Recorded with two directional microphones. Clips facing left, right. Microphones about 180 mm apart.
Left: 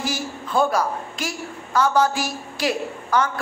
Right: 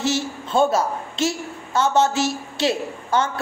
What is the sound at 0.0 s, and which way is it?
A woman's voice, 25° right (ahead or behind).